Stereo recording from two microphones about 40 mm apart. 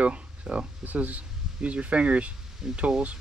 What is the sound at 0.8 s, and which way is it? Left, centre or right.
Speech, right.